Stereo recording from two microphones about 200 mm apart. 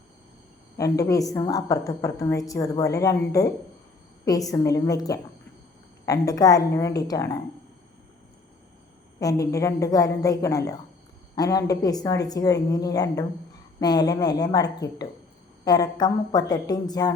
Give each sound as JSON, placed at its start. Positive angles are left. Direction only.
{"t": 0.8, "sound": "a woman's voice", "side_deg": 15}
{"t": 9.2, "sound": "a woman's voice", "side_deg": 15}